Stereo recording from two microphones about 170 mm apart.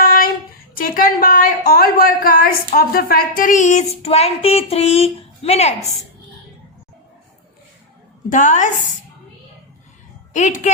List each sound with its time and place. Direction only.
0.0 s child singing: 55° left (ahead or behind)
0.7 s speech: 55° left (ahead or behind); by 5.7 s 40° left (ahead or behind)
8.3 s speech: 45° left (ahead or behind)
10.3 s speech: 45° left (ahead or behind)